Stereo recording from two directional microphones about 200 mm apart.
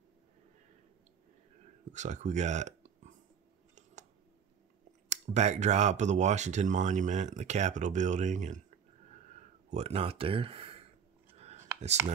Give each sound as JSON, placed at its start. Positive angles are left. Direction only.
{"t": 1.9, "sound": "speech", "side_deg": -35}
{"t": 5.1, "sound": "speech", "side_deg": -35}
{"t": 11.3, "sound": "a sound", "side_deg": -35}